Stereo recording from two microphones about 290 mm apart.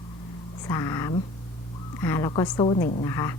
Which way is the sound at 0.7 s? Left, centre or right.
Centre.